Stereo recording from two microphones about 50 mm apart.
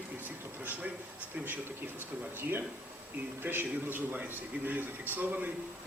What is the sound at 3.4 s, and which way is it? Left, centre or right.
A man's voice, right.